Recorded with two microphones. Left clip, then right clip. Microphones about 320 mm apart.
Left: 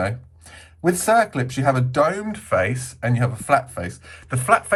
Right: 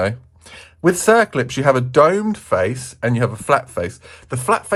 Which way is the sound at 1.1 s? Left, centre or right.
Centre.